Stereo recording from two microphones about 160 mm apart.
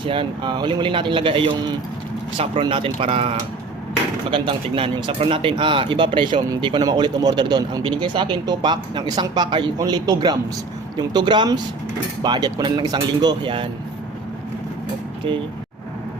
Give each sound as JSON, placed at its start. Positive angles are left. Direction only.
{"t": 0.0, "sound": "a man's voice", "side_deg": -30}